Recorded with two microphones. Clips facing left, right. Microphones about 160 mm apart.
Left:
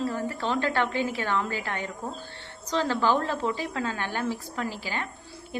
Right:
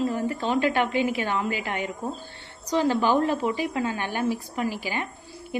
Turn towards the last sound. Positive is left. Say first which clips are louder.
# right 4 dB
turn(degrees=-15)  # may be behind; listen again after turning